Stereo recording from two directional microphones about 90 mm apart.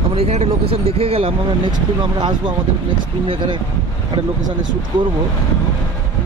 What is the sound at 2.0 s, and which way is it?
Speech, 60° right (ahead or behind).